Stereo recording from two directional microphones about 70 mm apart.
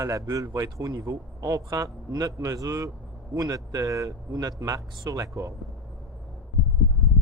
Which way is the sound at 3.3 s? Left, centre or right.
Right.